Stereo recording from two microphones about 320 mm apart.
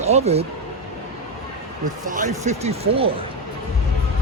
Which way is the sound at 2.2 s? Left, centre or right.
Right.